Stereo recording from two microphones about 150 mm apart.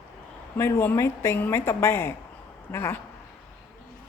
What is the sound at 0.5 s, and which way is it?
A woman's voice, 15° left (ahead or behind).